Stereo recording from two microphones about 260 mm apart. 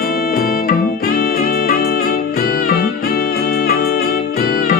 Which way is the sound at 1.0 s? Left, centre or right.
Left.